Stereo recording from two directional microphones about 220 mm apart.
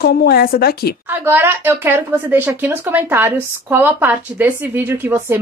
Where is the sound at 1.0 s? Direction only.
10° right (ahead or behind).